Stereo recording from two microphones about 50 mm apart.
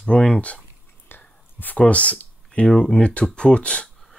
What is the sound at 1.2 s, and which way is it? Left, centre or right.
Whispering, left.